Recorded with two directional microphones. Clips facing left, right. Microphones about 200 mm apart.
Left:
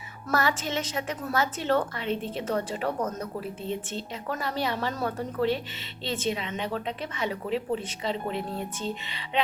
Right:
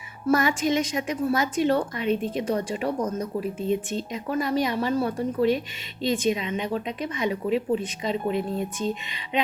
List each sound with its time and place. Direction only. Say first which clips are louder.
0.3 s speech: right 3 dB; 15° right (ahead or behind)